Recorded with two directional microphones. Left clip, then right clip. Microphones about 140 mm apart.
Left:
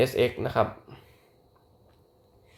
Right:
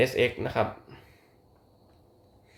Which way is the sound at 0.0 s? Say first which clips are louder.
Even; 25° left (ahead or behind).